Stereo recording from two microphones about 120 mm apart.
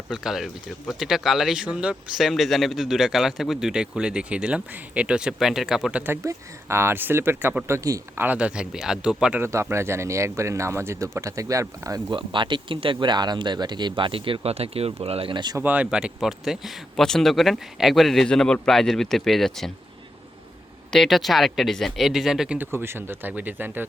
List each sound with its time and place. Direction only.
0.1 s speech: 5° right (ahead or behind)
6.0 s speech: 20° right (ahead or behind)
8.2 s speech: 10° right (ahead or behind)
9.4 s speech: 20° right (ahead or behind)
12.1 s speech: 40° right (ahead or behind)
15.5 s speech: 15° right (ahead or behind); by 19.7 s centre (ahead or behind)
20.9 s speech: centre (ahead or behind)
22.5 s speech: 20° right (ahead or behind)